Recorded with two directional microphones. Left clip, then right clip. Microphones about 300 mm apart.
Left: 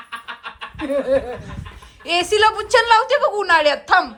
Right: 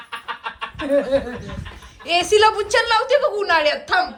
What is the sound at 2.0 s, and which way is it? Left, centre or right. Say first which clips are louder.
A woman's voice: right 1 dB; centre.